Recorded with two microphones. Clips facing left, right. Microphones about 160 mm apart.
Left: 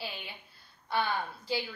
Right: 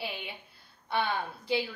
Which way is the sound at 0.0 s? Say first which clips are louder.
Right 3 dB; 20° right (ahead or behind).